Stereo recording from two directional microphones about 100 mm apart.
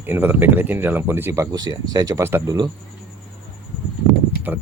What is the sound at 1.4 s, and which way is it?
Speech, 40° right (ahead or behind).